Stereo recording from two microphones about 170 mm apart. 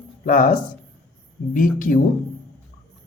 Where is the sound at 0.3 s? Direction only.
55° left (ahead or behind).